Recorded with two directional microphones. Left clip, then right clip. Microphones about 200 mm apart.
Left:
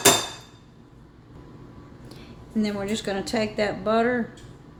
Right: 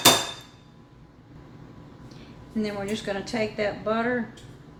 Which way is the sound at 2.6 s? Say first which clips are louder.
Left 1 dB; 40° left (ahead or behind).